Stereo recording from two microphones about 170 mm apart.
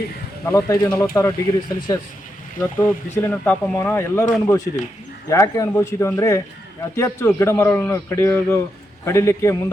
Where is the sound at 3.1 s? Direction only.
10° left (ahead or behind).